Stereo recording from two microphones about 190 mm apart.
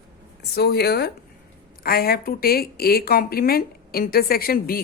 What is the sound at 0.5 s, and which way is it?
A woman's voice, 55° left (ahead or behind).